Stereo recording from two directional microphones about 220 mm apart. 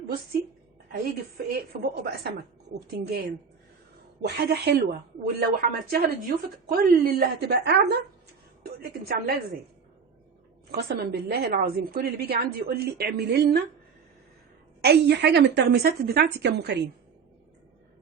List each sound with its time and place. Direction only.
2.7 s a woman's voice: 45° right (ahead or behind)
10.7 s a woman's voice: 45° right (ahead or behind)
14.8 s a woman's voice: 50° right (ahead or behind)